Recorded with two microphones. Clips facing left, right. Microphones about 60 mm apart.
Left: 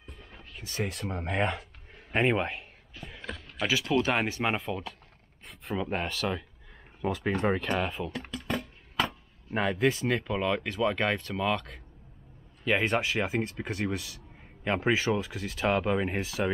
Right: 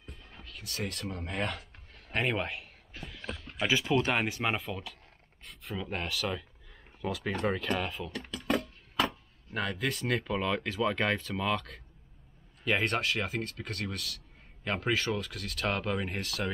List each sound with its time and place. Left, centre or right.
0.6 s speech: centre
3.0 s a sound: centre
4.0 s speech: centre
8.4 s a sound: centre
9.5 s speech: left
9.8 s speech: centre